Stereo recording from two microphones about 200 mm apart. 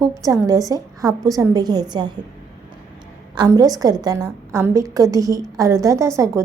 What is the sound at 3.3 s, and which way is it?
A woman's voice, 20° right (ahead or behind).